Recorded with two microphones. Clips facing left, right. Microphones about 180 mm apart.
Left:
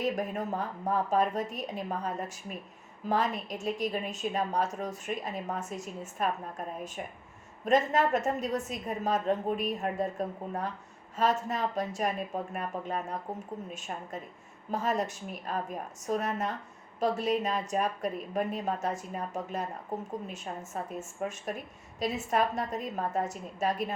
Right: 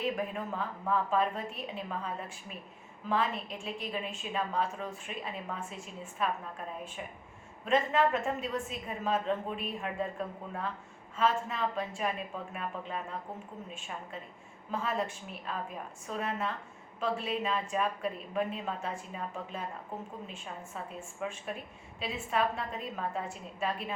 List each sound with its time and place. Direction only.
0.0 s a woman's voice: 40° left (ahead or behind)